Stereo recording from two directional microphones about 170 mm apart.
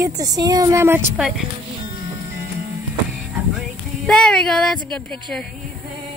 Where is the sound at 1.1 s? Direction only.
5° right (ahead or behind).